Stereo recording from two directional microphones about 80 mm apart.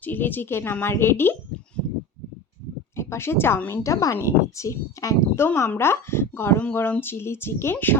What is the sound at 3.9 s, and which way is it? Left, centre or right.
A woman's voice, left.